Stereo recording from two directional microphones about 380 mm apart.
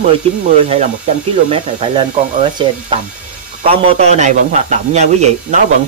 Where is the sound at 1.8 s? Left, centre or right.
Centre.